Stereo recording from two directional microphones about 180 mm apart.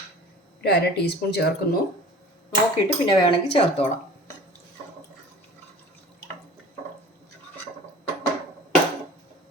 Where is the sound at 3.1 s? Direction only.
30° left (ahead or behind).